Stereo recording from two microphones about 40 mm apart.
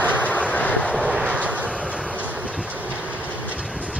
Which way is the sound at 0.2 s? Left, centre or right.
Left.